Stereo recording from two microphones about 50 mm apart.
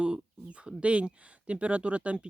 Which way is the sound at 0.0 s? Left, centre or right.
Right.